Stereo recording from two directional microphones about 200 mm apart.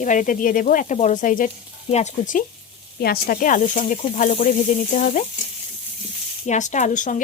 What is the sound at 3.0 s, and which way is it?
Speech, 50° left (ahead or behind).